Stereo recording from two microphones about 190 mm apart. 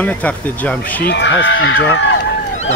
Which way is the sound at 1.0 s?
65° left (ahead or behind).